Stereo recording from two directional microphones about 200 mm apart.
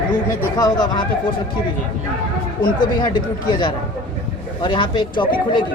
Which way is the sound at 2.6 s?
20° left (ahead or behind).